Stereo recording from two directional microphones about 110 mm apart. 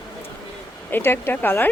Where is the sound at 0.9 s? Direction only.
20° left (ahead or behind).